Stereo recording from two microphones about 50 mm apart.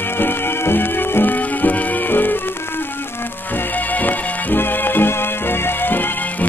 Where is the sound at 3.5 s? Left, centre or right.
Left.